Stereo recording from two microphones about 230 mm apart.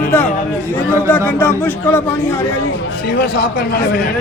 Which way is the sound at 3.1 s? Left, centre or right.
Left.